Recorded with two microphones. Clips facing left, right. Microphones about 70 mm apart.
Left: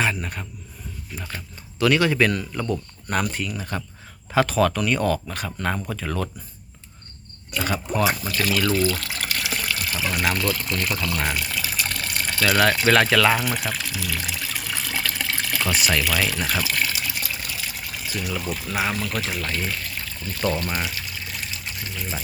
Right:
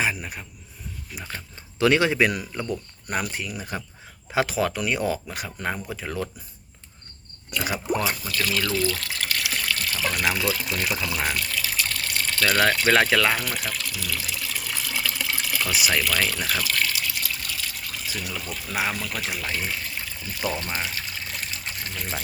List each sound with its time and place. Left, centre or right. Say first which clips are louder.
0.0 s a man's voice: left 2 dB; centre
1.8 s speech: left 1 dB; right
7.6 s speech: left 2 dB; centre
8.6 s speech: left 4 dB; left; by 10.2 s centre
10.3 s speech: left 1 dB; centre
11.2 s speech: left 1 dB; centre
11.4 s water: left 1 dB; left
11.9 s a sound: left 1 dB; left; by 12.9 s centre
12.9 s speech: left 3 dB; centre
13.3 s speech: left 4 dB; centre
14.3 s water: left 2 dB; centre
16.1 s water: left 2 dB; centre
19.5 s speech: left 1 dB; centre
20.9 s water: even; right